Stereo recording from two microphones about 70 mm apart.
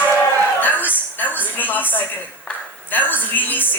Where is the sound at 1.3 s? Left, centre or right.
Left.